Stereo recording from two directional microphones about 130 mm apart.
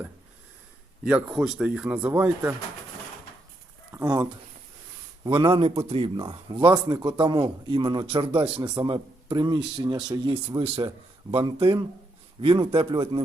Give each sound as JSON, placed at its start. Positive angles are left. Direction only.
{"t": 1.0, "sound": "speech", "side_deg": -5}
{"t": 5.2, "sound": "a man's voice", "side_deg": -40}